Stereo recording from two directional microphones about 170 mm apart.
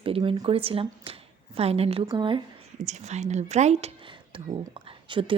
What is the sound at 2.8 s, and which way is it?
Speech, 40° right (ahead or behind).